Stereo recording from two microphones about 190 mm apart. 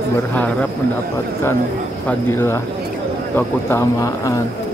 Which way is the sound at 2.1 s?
10° left (ahead or behind).